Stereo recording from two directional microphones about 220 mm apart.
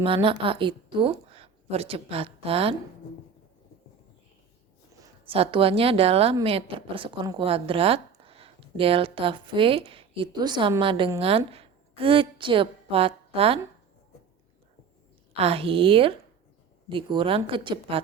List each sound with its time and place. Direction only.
0.0 s a woman's voice: 25° right (ahead or behind)
4.9 s a sound: 15° right (ahead or behind)
5.4 s speech: 25° right (ahead or behind)
15.4 s speech: 25° right (ahead or behind)